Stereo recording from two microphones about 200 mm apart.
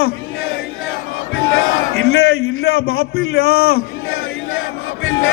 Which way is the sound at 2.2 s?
90° left.